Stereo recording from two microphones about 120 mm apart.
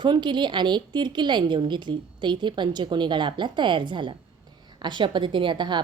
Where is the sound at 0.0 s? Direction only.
40° right (ahead or behind).